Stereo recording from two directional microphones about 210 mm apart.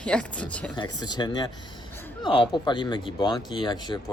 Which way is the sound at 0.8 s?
20° left (ahead or behind).